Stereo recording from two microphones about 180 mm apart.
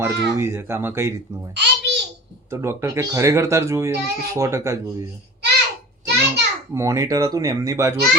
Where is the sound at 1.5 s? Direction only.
75° right (ahead or behind).